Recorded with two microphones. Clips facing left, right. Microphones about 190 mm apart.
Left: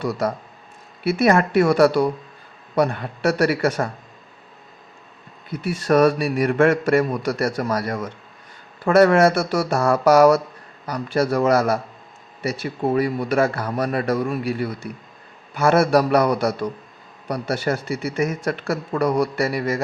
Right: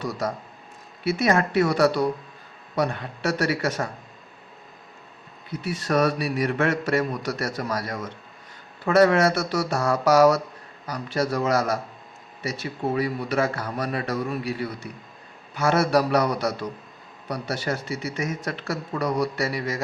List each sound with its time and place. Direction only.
1.0 s speech: 55° left (ahead or behind)
5.5 s speech: 55° left (ahead or behind)